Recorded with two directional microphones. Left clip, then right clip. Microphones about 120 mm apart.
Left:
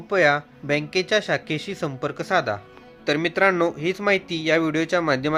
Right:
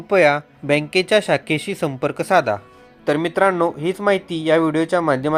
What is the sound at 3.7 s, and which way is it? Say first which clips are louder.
Speech: right 3 dB; 20° right (ahead or behind).